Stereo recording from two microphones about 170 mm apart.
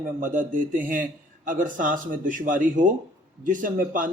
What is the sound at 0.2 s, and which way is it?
A man's voice, 50° right (ahead or behind).